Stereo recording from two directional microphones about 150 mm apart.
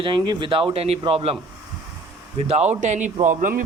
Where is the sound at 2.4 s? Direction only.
45° right (ahead or behind); by 3.6 s 60° right (ahead or behind).